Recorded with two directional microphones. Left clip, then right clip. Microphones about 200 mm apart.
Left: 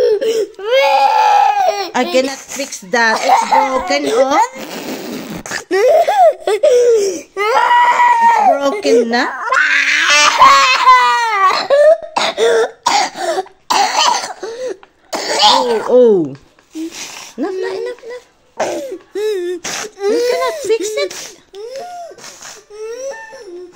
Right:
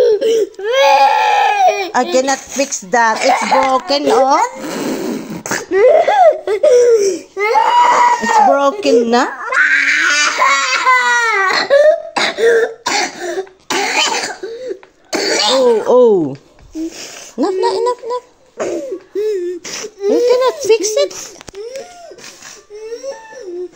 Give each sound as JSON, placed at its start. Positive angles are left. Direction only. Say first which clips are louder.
{"t": 0.0, "sound": "baby cry", "louder": "right 2 dB", "side_deg": 15}
{"t": 2.1, "sound": "speech", "louder": "right 2 dB", "side_deg": 0}
{"t": 3.2, "sound": "speech", "louder": "left 1 dB", "side_deg": 35}
{"t": 4.0, "sound": "chicken", "louder": "right 3 dB", "side_deg": 15}
{"t": 4.6, "sound": "a sound", "louder": "right 4 dB", "side_deg": 35}
{"t": 7.9, "sound": "chicken", "louder": "left 1 dB", "side_deg": 5}
{"t": 8.5, "sound": "a child's voice", "louder": "right 1 dB", "side_deg": -10}
{"t": 9.4, "sound": "crying", "louder": "even", "side_deg": 25}
{"t": 15.9, "sound": "speech", "louder": "left 2 dB", "side_deg": -5}
{"t": 17.6, "sound": "speech", "louder": "right 8 dB", "side_deg": 20}
{"t": 18.6, "sound": "throat clearing", "louder": "left 1 dB", "side_deg": 30}
{"t": 20.3, "sound": "a child's voice", "louder": "right 3 dB", "side_deg": -10}